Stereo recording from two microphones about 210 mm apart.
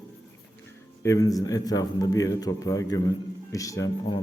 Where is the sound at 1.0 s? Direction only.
15° left (ahead or behind).